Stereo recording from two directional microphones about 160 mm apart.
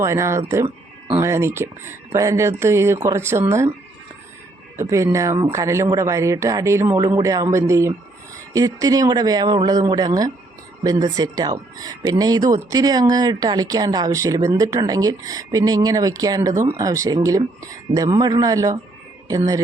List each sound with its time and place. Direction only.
0.0 s speech: 20° right (ahead or behind)
4.8 s speech: 20° right (ahead or behind)